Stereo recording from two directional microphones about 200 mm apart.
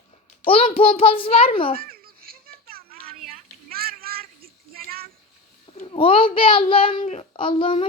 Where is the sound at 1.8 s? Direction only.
45° right (ahead or behind).